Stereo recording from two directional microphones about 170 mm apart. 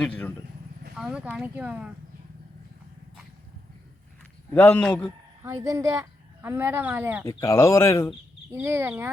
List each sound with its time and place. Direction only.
0.0 s speech: 5° left (ahead or behind)
0.9 s speech: 5° right (ahead or behind)
4.5 s speech: 10° left (ahead or behind)
5.5 s speech: 20° right (ahead or behind)
7.3 s speech: 15° left (ahead or behind)
8.5 s speech: 15° right (ahead or behind)